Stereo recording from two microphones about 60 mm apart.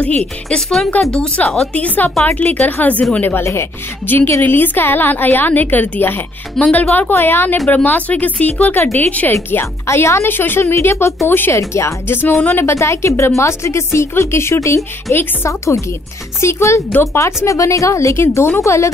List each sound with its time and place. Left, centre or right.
0.0 s speech: left
0.7 s speech: centre
1.7 s a woman's voice: left
9.8 s speech: left
10.2 s a woman's voice: left
10.6 s a woman's voice: left
11.5 s speech: left